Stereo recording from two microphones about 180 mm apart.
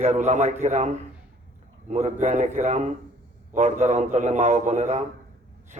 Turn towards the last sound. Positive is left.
turn(degrees=-40)  # may be behind; listen again after turning